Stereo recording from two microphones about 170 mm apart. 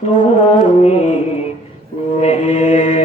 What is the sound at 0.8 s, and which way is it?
Music, 40° left (ahead or behind).